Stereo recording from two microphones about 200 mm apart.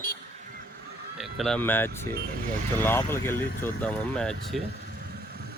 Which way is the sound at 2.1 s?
50° right (ahead or behind).